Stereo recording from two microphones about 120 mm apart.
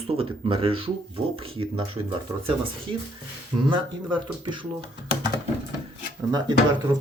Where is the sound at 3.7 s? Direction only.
40° right (ahead or behind).